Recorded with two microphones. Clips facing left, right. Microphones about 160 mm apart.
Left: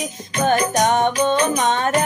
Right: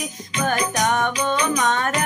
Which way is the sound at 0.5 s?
45° left (ahead or behind).